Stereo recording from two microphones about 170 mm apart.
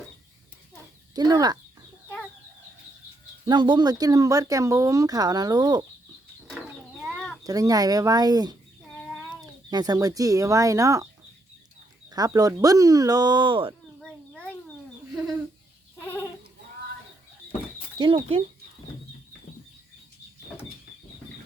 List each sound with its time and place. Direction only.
1.1 s speech: 25° right (ahead or behind)
3.4 s speech: 25° right (ahead or behind)
7.0 s chicken: centre (ahead or behind)
7.4 s speech: 20° right (ahead or behind)
9.6 s speech: 25° right (ahead or behind)
12.1 s speech: 20° right (ahead or behind)
14.0 s a sound: 5° left (ahead or behind)
16.0 s goat: 15° left (ahead or behind)
17.9 s speech: 30° right (ahead or behind)